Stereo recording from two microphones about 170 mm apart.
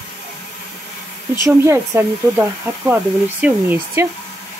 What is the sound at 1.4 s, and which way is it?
Speech, 15° right (ahead or behind).